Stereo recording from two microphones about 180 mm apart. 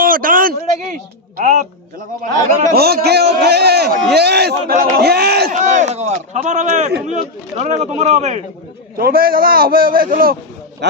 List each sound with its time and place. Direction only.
0.0 s a man's voice: 50° right (ahead or behind)
2.7 s a man's voice: 60° right (ahead or behind); by 8.4 s 40° right (ahead or behind)
9.0 s a man's voice: 55° right (ahead or behind)